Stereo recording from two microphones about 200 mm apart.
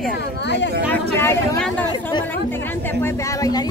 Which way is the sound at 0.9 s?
10° left (ahead or behind).